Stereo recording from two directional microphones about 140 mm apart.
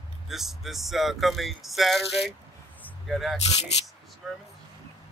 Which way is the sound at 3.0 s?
Centre (ahead or behind).